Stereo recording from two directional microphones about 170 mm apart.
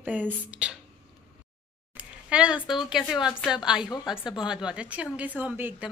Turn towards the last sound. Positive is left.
turn(degrees=-10)  # may be behind; listen again after turning